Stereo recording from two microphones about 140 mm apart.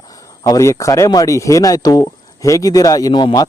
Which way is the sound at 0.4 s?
25° left (ahead or behind).